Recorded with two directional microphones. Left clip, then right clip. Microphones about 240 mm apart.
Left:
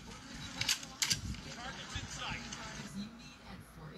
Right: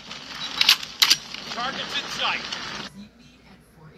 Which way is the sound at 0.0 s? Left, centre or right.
Right.